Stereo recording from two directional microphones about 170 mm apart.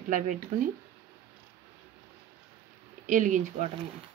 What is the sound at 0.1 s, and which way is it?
Speech, 50° right (ahead or behind).